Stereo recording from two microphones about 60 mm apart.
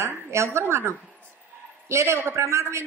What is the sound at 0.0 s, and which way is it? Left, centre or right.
A woman's voice, right.